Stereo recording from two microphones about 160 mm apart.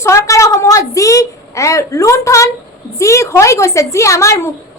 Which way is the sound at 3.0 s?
20° left (ahead or behind).